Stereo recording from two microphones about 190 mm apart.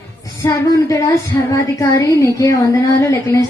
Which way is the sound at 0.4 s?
15° left (ahead or behind).